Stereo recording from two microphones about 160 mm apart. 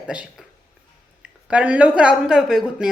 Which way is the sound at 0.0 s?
5° right (ahead or behind).